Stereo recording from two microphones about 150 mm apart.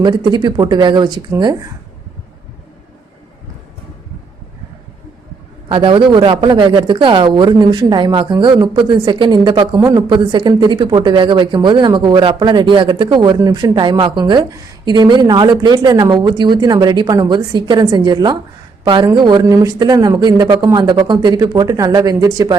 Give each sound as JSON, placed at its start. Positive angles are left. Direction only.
{"t": 0.0, "sound": "speech", "side_deg": -30}
{"t": 5.6, "sound": "speech", "side_deg": -35}